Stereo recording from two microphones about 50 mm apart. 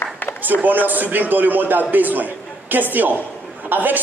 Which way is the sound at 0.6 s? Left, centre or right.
Right.